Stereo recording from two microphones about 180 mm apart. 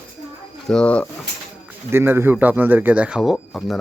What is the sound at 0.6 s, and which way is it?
Speech, 5° left (ahead or behind).